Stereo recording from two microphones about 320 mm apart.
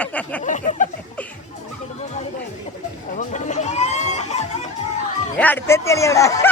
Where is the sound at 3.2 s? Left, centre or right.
Left.